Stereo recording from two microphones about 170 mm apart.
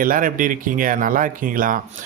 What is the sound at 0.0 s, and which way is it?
Speech, 55° right (ahead or behind).